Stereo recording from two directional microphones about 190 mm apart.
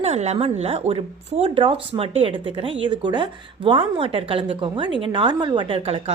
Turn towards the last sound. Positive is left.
turn(degrees=-30)  # may be behind; listen again after turning